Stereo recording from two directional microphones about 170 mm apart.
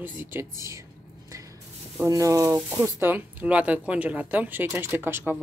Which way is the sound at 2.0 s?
20° right (ahead or behind).